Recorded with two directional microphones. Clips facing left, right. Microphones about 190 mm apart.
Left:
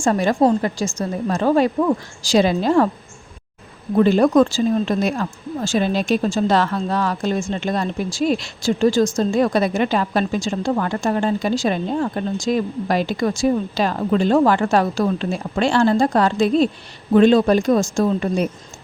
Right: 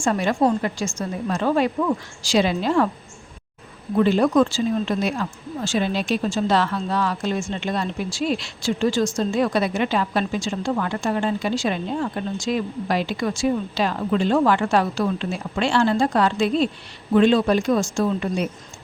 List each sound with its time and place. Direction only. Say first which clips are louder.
0.0 s a woman's voice: left 3 dB; 40° left (ahead or behind)
3.9 s a woman's voice: left 3 dB; 45° left (ahead or behind)